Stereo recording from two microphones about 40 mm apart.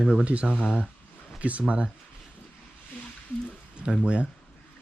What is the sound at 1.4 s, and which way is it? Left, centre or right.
Speech, right.